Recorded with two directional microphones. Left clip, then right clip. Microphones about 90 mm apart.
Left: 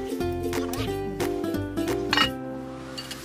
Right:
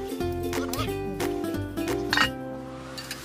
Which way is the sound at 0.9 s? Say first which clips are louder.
Left 1 dB; 5° left (ahead or behind).